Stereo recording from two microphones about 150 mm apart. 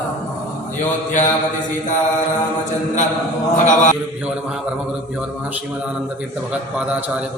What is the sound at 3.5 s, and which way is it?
Mantra, 55° left (ahead or behind).